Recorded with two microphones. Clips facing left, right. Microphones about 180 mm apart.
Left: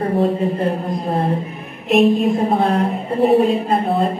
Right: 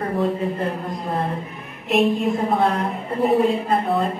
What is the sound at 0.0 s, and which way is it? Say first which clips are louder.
Speech: left 5 dB; 30° left (ahead or behind).